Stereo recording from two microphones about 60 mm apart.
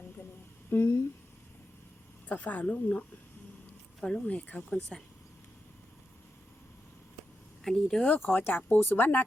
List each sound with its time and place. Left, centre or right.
0.7 s speech: left
2.3 s speech: left
4.0 s speech: centre
4.4 s speech: left
7.6 s speech: centre
8.0 s speech: left